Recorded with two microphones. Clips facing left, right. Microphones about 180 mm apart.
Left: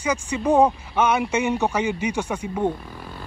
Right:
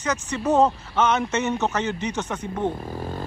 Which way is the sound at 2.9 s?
45° right (ahead or behind).